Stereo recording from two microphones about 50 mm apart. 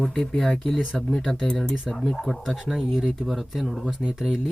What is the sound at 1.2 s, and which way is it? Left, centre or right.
Speech, centre.